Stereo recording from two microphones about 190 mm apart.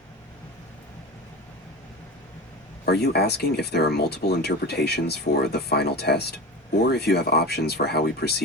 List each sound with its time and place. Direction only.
2.8 s speech: 60° left (ahead or behind)